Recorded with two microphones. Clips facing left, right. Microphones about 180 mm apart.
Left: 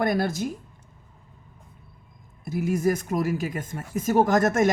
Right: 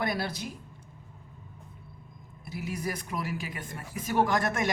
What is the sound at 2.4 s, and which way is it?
Speech, 45° left (ahead or behind).